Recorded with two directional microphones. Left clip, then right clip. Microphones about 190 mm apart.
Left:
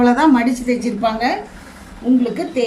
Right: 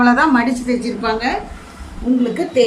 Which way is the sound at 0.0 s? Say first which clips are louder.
Even; 35° left (ahead or behind).